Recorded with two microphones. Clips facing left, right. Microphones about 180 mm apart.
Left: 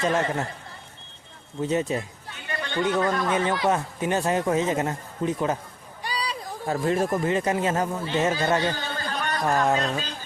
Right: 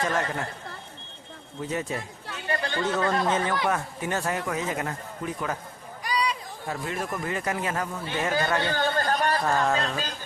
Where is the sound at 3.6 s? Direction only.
20° left (ahead or behind).